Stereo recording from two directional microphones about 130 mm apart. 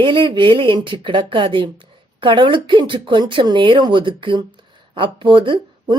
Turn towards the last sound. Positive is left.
turn(degrees=-40)  # may be behind; listen again after turning